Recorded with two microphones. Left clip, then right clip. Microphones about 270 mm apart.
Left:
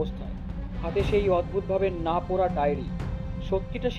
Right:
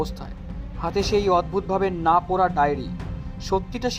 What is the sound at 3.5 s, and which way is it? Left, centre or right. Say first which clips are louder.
Speech: right 5 dB; right.